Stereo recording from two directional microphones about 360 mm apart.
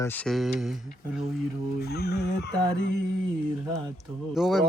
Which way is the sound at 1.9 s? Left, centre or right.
Left.